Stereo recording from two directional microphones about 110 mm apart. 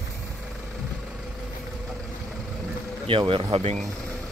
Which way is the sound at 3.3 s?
60° right (ahead or behind).